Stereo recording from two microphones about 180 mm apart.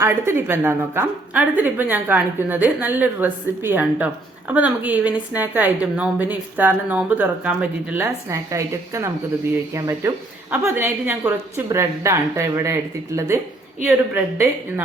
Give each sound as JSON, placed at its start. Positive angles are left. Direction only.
{"t": 0.0, "sound": "a woman's voice", "side_deg": -15}